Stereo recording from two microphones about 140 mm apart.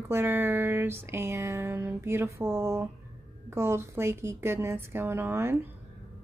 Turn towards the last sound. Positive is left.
turn(degrees=-15)  # may be behind; listen again after turning